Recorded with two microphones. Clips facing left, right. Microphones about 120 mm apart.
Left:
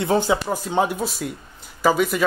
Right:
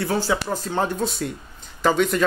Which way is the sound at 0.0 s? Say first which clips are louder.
Left 3 dB; 20° left (ahead or behind).